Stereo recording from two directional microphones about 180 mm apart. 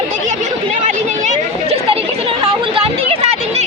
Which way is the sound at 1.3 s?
35° right (ahead or behind).